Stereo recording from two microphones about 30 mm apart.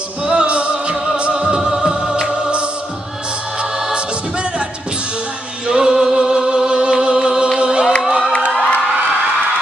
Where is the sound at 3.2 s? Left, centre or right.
Right.